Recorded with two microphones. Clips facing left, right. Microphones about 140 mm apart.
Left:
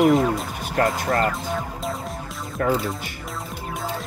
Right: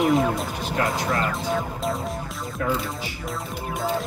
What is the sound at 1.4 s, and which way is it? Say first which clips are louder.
Music: right 2 dB; centre (ahead or behind).